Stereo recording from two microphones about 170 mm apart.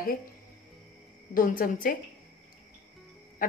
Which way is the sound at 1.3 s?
55° left (ahead or behind).